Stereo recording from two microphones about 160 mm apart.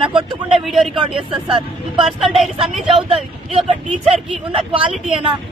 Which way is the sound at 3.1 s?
35° right (ahead or behind).